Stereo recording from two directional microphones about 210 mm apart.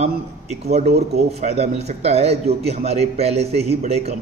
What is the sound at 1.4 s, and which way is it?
A man's voice, 30° right (ahead or behind).